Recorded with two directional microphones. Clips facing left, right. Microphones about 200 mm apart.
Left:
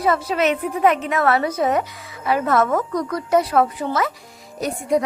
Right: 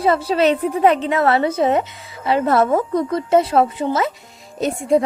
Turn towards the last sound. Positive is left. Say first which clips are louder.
# right 4 dB
turn(degrees=-25)  # may be behind; listen again after turning